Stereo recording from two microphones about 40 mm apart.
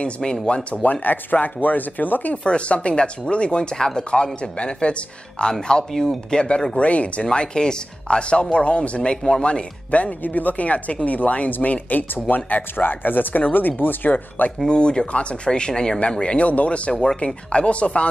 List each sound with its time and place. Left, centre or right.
0.0 s speech: left
1.0 s speech: left
2.4 s speech: left
3.7 s speech: centre
4.1 s speech: left
6.8 s speech: left
7.2 s speech: centre; by 14.1 s left
14.7 s speech: left
16.4 s speech: left